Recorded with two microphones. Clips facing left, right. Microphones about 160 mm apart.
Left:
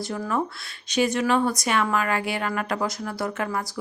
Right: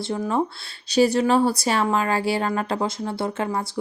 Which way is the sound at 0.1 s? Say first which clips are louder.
Right 5 dB; 30° right (ahead or behind).